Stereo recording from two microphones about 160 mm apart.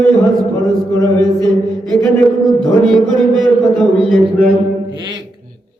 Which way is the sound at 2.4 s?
Centre (ahead or behind).